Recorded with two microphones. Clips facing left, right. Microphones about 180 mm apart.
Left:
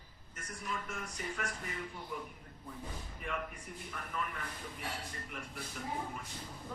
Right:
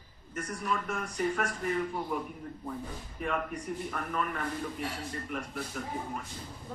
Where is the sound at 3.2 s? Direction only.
50° right (ahead or behind).